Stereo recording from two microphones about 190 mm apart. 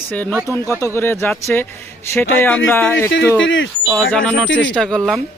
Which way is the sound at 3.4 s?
80° left.